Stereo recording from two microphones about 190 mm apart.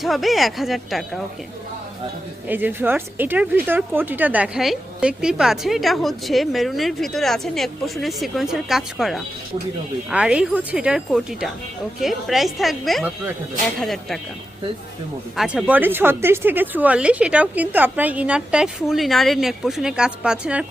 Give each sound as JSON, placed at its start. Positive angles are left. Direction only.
{"t": 0.0, "sound": "speech", "side_deg": 0}
{"t": 2.5, "sound": "speech", "side_deg": -10}
{"t": 15.4, "sound": "speech", "side_deg": -5}